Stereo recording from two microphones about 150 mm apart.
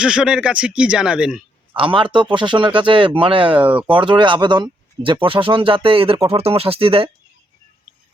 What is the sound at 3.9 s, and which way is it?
Speech, 35° right (ahead or behind).